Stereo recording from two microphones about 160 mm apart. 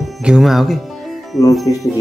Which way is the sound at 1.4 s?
20° left (ahead or behind).